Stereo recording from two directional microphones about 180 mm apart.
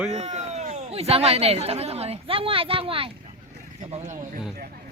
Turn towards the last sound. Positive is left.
turn(degrees=-40)  # may be behind; listen again after turning